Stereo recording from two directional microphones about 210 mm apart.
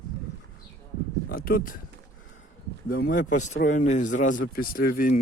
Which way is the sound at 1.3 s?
45° left (ahead or behind).